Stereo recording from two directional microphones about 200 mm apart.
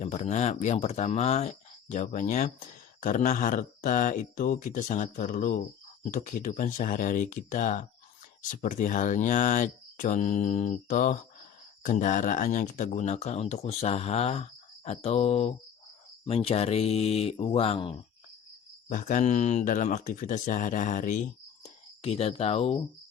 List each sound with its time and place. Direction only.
0.0 s speech: 35° left (ahead or behind)
18.9 s speech: 40° left (ahead or behind)